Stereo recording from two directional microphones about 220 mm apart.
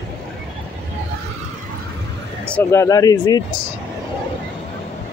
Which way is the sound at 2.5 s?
10° left (ahead or behind).